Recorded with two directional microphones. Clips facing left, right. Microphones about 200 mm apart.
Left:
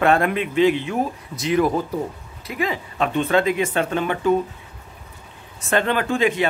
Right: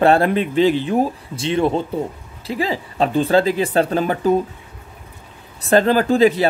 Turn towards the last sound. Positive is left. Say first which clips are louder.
# right 6 dB
turn(degrees=-35)  # may be behind; listen again after turning